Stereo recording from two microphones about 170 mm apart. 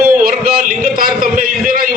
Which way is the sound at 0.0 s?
60° right (ahead or behind).